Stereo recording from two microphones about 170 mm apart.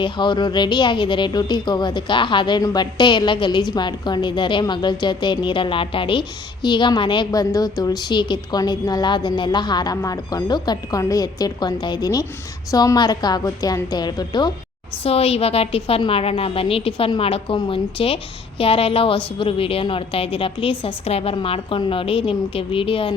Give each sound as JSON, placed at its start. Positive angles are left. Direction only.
{"t": 0.0, "sound": "speech", "side_deg": 25}
{"t": 15.0, "sound": "a woman's voice", "side_deg": 35}